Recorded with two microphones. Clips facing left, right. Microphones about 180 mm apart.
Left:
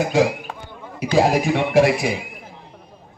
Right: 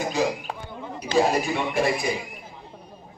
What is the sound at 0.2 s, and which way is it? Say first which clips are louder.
Speech: left 7 dB; 90° left.